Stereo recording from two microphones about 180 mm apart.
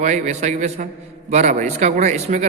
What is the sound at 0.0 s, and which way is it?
A man's voice, 40° right (ahead or behind).